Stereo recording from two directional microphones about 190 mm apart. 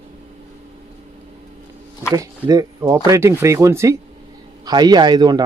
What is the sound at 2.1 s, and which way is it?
Speech, 20° right (ahead or behind).